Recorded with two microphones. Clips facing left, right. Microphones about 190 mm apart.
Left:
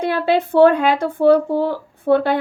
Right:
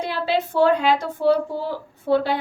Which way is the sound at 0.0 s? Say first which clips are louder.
Left 5 dB; 55° left (ahead or behind).